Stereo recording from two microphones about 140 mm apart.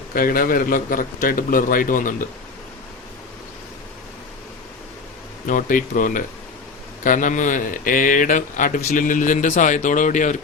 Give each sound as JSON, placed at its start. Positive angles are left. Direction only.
{"t": 0.1, "sound": "a man's voice", "side_deg": 90}
{"t": 5.5, "sound": "a man's voice", "side_deg": 75}